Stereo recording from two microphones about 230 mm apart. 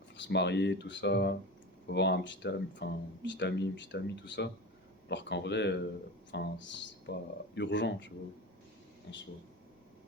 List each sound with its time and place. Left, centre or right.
0.2 s speech: left